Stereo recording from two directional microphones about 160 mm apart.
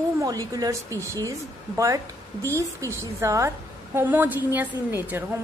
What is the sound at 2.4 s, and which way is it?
A woman's voice, 15° right (ahead or behind).